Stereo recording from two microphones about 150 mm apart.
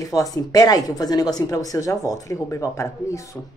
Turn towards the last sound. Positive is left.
turn(degrees=20)  # may be behind; listen again after turning